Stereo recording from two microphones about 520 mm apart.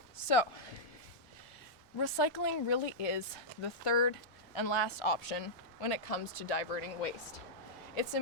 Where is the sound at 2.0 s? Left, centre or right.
Left.